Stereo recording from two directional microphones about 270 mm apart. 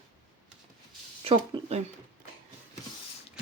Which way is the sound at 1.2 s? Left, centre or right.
Centre.